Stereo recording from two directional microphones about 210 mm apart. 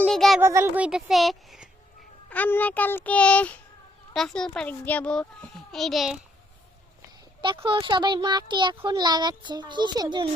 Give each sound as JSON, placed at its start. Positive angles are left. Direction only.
{"t": 0.0, "sound": "a sound", "side_deg": 0}
{"t": 0.4, "sound": "a child's voice", "side_deg": -10}
{"t": 7.4, "sound": "a child's voice", "side_deg": -25}